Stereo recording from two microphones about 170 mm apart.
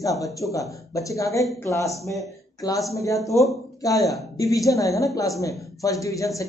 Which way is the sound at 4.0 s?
Centre (ahead or behind).